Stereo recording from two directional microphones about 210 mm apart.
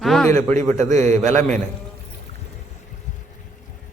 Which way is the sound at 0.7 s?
15° left (ahead or behind).